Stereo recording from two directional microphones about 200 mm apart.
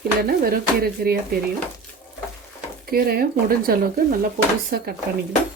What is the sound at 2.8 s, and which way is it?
Speech, 50° right (ahead or behind).